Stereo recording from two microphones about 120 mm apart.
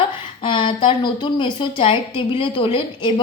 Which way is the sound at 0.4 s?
45° left (ahead or behind).